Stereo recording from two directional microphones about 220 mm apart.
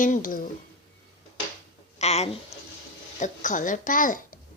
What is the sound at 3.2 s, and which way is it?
A child's voice, 35° left (ahead or behind).